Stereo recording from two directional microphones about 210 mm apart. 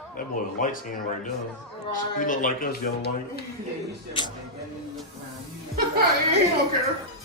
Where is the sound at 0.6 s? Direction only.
40° left (ahead or behind).